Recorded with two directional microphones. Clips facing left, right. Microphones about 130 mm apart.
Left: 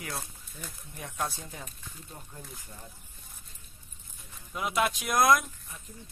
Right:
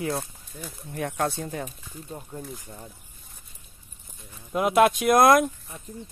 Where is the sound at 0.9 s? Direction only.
65° right (ahead or behind).